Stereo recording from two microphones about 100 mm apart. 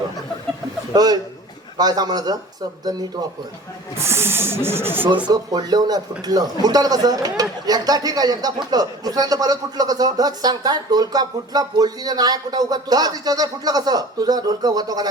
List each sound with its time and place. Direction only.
0.9 s speech: 40° right (ahead or behind)
3.9 s speech: 25° right (ahead or behind)
5.3 s speech: 40° right (ahead or behind)